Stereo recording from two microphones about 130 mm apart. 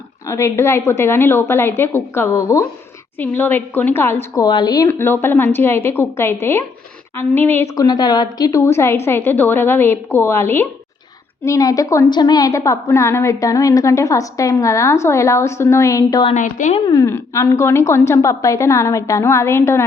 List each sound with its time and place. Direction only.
0.3 s a woman's voice: 20° left (ahead or behind)
4.4 s speech: 30° left (ahead or behind)
4.9 s a woman's voice: 15° left (ahead or behind)
7.8 s a woman's voice: 30° left (ahead or behind)
16.3 s a woman's voice: 75° left (ahead or behind)
16.8 s a woman's voice: 25° left (ahead or behind)